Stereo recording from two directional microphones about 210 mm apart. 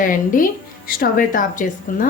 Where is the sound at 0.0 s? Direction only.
40° left (ahead or behind).